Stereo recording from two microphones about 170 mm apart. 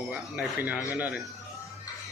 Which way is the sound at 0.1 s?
5° right (ahead or behind).